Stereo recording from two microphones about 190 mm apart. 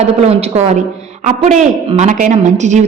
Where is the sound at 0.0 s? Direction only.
35° right (ahead or behind).